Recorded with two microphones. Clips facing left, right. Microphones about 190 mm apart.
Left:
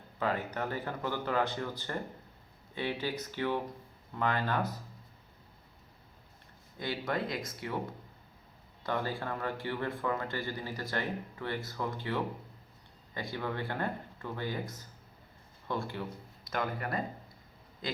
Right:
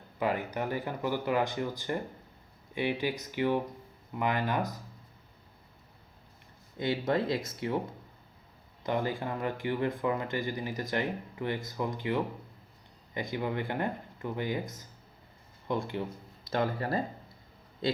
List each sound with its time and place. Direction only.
0.2 s speech: 15° right (ahead or behind)
6.7 s speech: 20° right (ahead or behind)
8.8 s a man's voice: 15° right (ahead or behind)